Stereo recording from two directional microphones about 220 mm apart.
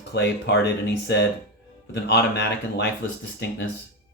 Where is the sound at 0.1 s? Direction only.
50° left (ahead or behind).